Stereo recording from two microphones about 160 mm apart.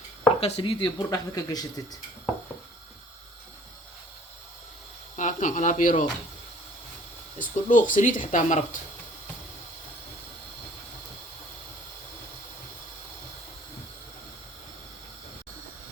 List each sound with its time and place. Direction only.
0.3 s speech: 40° left (ahead or behind); by 1.8 s 20° left (ahead or behind)
5.1 s speech: 50° left (ahead or behind)
7.3 s speech: 55° left (ahead or behind)